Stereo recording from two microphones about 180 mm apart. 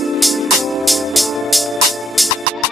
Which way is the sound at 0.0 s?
Centre (ahead or behind).